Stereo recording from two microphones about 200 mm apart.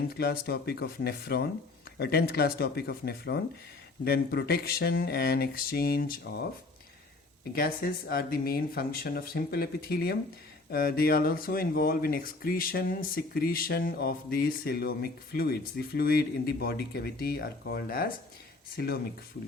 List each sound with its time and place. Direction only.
0.2 s speech: 50° left (ahead or behind)
7.5 s speech: 50° left (ahead or behind)